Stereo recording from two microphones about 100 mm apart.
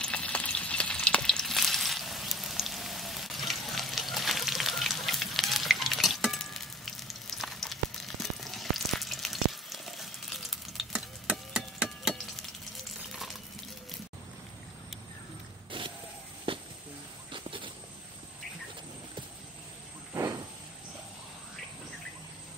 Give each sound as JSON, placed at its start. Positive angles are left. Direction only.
{"t": 0.0, "sound": "frying", "side_deg": 10}
{"t": 11.2, "sound": "a sound", "side_deg": -10}
{"t": 13.1, "sound": "frying", "side_deg": 0}
{"t": 15.7, "sound": "vehicle", "side_deg": -60}
{"t": 16.5, "sound": "a sound", "side_deg": -60}
{"t": 20.2, "sound": "vehicle", "side_deg": -35}